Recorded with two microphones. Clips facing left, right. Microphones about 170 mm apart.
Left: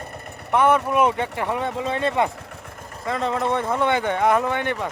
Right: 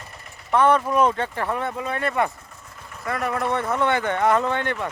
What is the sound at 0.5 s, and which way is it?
Speech, 10° left (ahead or behind).